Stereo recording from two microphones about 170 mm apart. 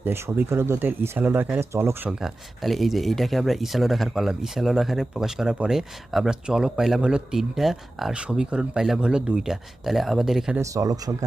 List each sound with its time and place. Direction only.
0.0 s speech: 15° right (ahead or behind)
2.2 s speech: centre (ahead or behind)
10.6 s speech: 20° right (ahead or behind)